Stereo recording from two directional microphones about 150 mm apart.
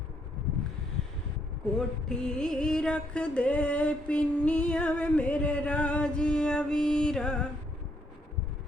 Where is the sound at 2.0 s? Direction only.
5° left (ahead or behind).